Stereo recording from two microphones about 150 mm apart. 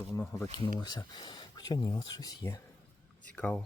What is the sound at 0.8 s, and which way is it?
Speech, 30° left (ahead or behind).